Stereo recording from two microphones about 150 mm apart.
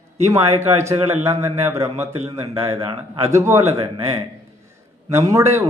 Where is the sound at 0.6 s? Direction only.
15° right (ahead or behind).